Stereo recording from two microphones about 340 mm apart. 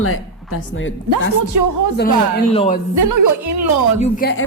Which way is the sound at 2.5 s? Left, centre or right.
Centre.